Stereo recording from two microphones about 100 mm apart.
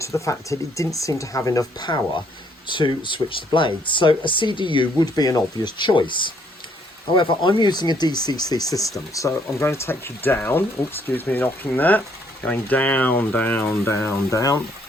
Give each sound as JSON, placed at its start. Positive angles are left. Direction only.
{"t": 0.0, "sound": "speech", "side_deg": 30}
{"t": 2.6, "sound": "speech", "side_deg": 55}
{"t": 13.7, "sound": "speech", "side_deg": 25}